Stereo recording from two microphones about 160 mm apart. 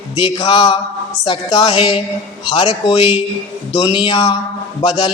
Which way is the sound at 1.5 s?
25° left (ahead or behind).